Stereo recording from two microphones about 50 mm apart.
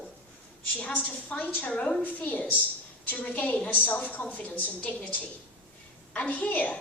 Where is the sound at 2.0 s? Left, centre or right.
Left.